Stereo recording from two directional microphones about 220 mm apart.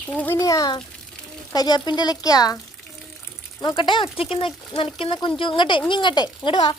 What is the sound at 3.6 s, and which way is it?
Speech, 20° left (ahead or behind).